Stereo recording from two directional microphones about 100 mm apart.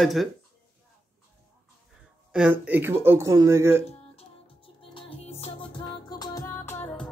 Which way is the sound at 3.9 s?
70° left (ahead or behind).